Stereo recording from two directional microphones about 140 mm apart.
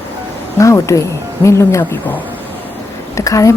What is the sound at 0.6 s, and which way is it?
Speech, 20° left (ahead or behind).